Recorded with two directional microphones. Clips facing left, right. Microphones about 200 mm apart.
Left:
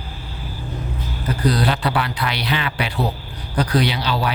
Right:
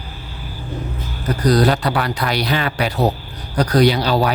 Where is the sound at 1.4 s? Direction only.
40° right (ahead or behind).